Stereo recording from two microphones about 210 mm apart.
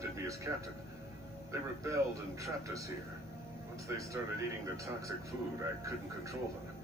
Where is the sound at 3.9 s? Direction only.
10° right (ahead or behind).